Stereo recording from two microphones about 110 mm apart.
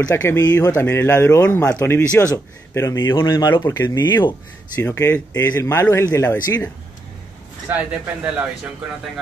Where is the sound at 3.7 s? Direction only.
25° left (ahead or behind).